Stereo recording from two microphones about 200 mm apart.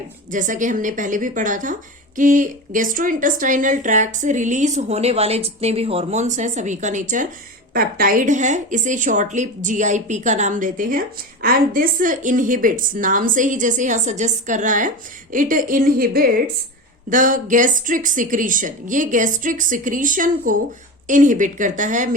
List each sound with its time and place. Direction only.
0.3 s a woman's voice: 40° right (ahead or behind)